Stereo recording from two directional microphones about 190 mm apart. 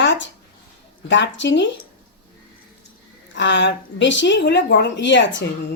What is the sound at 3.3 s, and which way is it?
A woman's voice, 70° left (ahead or behind).